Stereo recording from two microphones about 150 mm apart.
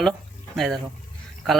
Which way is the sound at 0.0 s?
Centre (ahead or behind).